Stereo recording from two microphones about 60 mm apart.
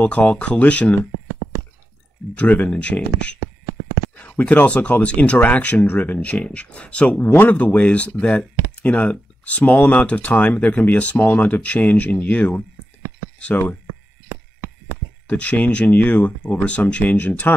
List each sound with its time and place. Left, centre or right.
0.0 s speech: left
2.3 s speech: left
15.2 s speech: left